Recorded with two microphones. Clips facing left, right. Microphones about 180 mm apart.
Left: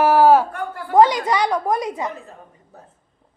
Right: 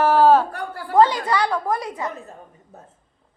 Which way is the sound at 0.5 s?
35° right (ahead or behind).